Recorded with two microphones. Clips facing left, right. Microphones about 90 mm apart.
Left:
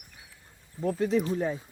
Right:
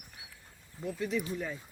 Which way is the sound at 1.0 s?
40° left (ahead or behind).